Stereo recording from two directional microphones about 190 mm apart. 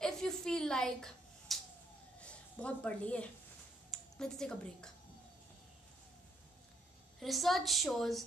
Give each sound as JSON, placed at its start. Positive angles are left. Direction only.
{"t": 0.0, "sound": "a sound", "side_deg": 5}
{"t": 3.9, "sound": "a woman's voice", "side_deg": 5}
{"t": 7.2, "sound": "a woman's voice", "side_deg": 0}